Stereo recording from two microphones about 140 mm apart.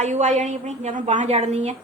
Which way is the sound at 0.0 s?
55° right (ahead or behind).